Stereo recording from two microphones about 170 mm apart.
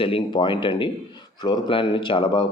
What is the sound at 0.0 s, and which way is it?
Speech, 30° left (ahead or behind).